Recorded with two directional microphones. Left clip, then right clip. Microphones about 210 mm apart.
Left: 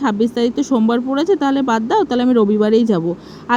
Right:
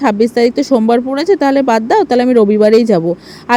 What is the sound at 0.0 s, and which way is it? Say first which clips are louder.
Speech: right 6 dB; 20° right (ahead or behind).